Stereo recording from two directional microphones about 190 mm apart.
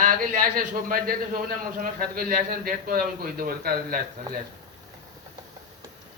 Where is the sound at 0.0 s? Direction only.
45° right (ahead or behind).